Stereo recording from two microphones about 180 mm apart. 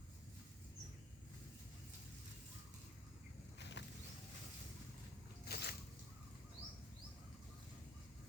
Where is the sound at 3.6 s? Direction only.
75° left (ahead or behind).